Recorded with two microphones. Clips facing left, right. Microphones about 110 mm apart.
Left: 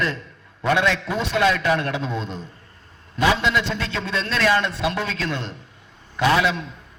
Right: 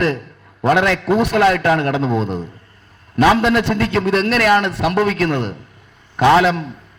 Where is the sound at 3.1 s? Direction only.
75° right (ahead or behind).